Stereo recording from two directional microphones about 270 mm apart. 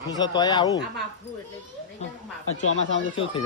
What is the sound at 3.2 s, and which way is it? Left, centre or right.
Speech, centre.